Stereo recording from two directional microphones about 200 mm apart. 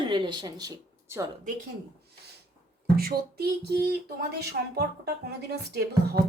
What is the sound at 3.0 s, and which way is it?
Speech, 50° right (ahead or behind).